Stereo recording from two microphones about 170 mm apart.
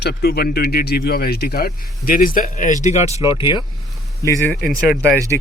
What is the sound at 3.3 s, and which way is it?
Speech, 30° left (ahead or behind).